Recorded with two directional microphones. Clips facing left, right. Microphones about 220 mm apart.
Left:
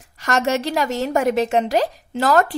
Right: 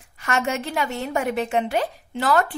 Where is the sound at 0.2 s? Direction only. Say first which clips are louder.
Left 4 dB; 40° left (ahead or behind).